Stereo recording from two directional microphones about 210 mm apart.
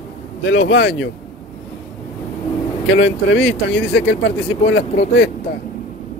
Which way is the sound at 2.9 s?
55° left (ahead or behind).